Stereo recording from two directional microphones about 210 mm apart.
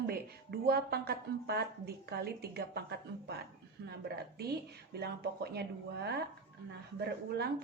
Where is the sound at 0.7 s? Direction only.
50° right (ahead or behind).